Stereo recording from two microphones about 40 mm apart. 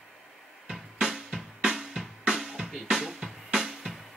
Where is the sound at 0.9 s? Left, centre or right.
Centre.